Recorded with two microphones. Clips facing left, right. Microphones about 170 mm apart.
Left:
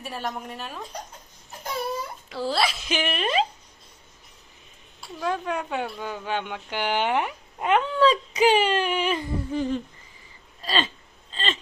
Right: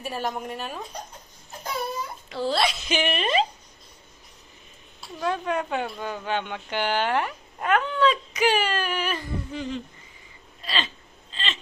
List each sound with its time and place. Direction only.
0.0 s a woman's voice: centre (ahead or behind)
2.3 s a woman's voice: 5° left (ahead or behind)
5.2 s speech: 5° left (ahead or behind); by 7.9 s 20° left (ahead or behind)
7.9 s speech: 35° left (ahead or behind)
8.4 s a sound: 25° left (ahead or behind)
9.5 s humming: 45° left (ahead or behind)
10.6 s hiccup: 40° left (ahead or behind)